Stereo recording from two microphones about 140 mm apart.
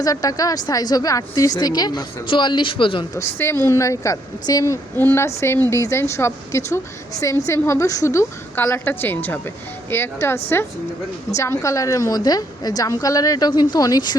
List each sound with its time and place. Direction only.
0.0 s a woman's voice: 25° left (ahead or behind)
3.2 s a woman's voice: 20° left (ahead or behind)